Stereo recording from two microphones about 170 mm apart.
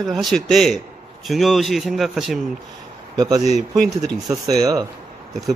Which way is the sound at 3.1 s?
20° right (ahead or behind).